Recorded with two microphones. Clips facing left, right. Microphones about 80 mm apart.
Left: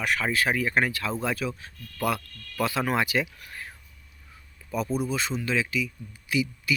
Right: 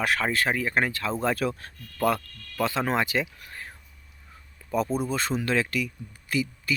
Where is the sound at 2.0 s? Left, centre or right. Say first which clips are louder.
Right 3 dB; right.